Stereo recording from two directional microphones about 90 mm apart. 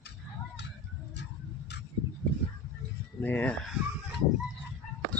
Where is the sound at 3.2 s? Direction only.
20° left (ahead or behind).